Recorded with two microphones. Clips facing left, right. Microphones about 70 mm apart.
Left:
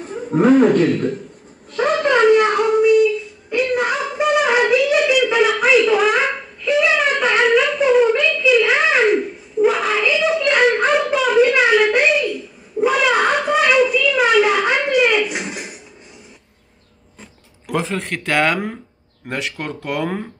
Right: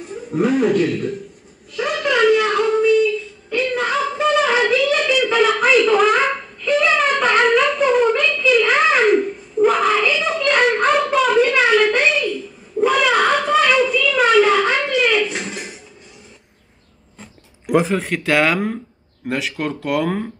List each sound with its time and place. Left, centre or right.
0.0 s a man's voice: left
1.7 s a sound: left; by 15.7 s centre
17.6 s speech: centre